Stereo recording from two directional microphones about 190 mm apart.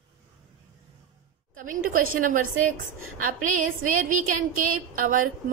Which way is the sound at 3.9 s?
45° right (ahead or behind).